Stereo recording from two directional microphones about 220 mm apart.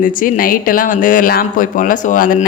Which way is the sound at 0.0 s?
40° left (ahead or behind).